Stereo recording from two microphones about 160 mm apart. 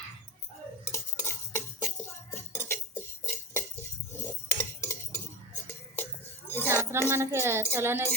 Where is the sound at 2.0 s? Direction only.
15° left (ahead or behind).